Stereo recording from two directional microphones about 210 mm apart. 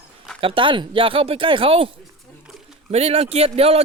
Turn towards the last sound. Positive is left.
turn(degrees=-30)  # may be behind; listen again after turning